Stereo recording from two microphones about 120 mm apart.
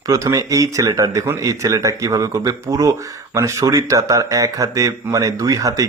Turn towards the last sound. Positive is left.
turn(degrees=-30)  # may be behind; listen again after turning